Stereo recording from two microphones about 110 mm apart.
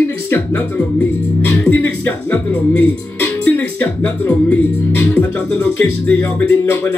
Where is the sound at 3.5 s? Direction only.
15° left (ahead or behind).